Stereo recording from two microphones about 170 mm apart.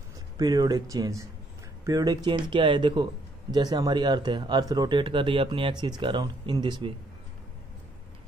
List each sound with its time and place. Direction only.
0.4 s speech: 20° right (ahead or behind)